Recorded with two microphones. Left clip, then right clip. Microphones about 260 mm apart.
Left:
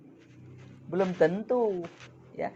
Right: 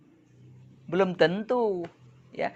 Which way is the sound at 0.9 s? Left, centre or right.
Right.